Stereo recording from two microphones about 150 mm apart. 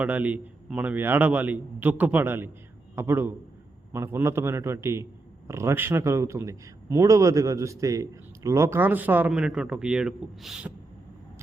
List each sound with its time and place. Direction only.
0.0 s a man's voice: 10° right (ahead or behind)